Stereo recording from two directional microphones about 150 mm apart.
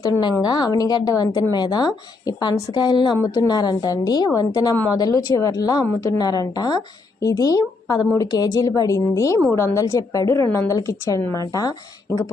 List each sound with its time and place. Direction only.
0.0 s speech: 25° left (ahead or behind)